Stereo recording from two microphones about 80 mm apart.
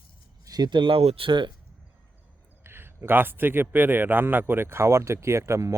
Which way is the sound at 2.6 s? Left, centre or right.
Right.